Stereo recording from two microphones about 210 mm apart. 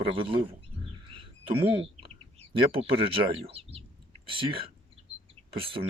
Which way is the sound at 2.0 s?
25° right (ahead or behind).